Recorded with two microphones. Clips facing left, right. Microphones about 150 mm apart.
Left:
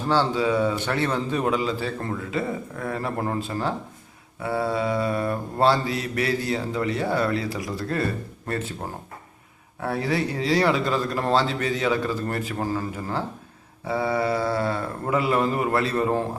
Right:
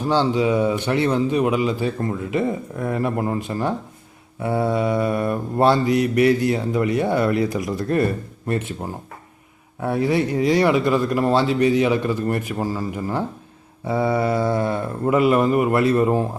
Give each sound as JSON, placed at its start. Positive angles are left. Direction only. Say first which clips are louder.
{"t": 0.1, "sound": "speech", "louder": "right 3 dB", "side_deg": -15}
{"t": 4.4, "sound": "mantra", "louder": "right 4 dB", "side_deg": -20}
{"t": 9.8, "sound": "speech", "louder": "right 5 dB", "side_deg": -20}
{"t": 13.8, "sound": "mantra", "louder": "right 4 dB", "side_deg": -25}